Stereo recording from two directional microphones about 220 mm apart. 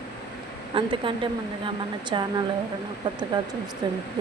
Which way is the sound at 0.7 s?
25° right (ahead or behind).